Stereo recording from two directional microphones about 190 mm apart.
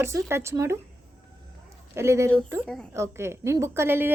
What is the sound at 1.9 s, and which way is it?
Speech, 15° right (ahead or behind).